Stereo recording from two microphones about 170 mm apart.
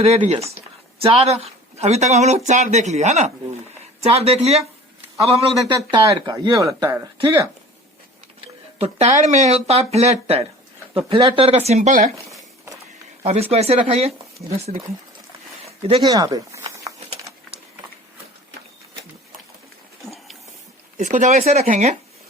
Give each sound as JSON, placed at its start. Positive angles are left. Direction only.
{"t": 0.0, "sound": "speech", "side_deg": -40}
{"t": 5.4, "sound": "speech", "side_deg": -30}
{"t": 8.8, "sound": "speech", "side_deg": -40}
{"t": 13.2, "sound": "speech", "side_deg": -35}
{"t": 15.6, "sound": "a sound", "side_deg": -35}
{"t": 16.0, "sound": "speech", "side_deg": -20}
{"t": 16.9, "sound": "a sound", "side_deg": -20}
{"t": 21.0, "sound": "speech", "side_deg": -45}